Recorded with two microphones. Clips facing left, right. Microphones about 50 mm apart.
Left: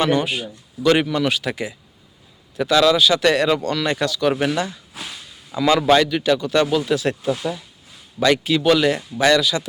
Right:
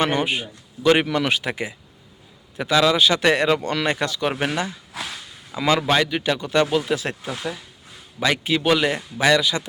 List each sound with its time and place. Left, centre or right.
0.0 s a man's voice: right
1.0 s speech: right; by 3.0 s centre
3.0 s speech: right; by 6.1 s centre
6.1 s speech: centre
8.4 s speech: centre